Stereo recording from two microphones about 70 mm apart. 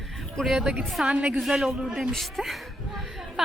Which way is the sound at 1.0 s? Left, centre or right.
Centre.